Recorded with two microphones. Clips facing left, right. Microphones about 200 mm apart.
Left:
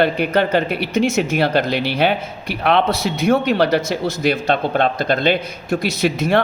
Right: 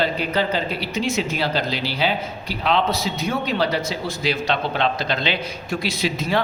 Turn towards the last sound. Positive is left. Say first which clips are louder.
# left 5 dB
turn(degrees=65)  # may be behind; listen again after turning